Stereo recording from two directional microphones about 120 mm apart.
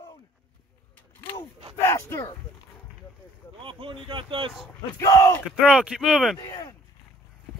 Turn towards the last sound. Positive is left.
turn(degrees=35)  # may be behind; listen again after turning